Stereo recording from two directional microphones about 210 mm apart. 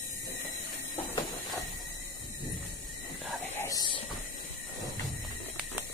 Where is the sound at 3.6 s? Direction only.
15° left (ahead or behind).